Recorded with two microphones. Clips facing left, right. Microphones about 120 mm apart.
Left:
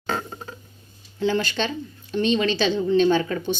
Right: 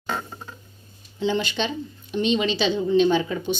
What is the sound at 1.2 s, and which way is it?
A woman's voice, 20° right (ahead or behind).